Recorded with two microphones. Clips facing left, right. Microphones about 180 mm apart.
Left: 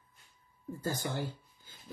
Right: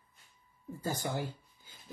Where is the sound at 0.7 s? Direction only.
10° right (ahead or behind).